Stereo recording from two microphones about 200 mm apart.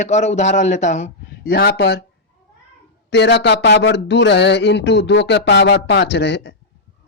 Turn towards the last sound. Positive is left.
turn(degrees=60)  # may be behind; listen again after turning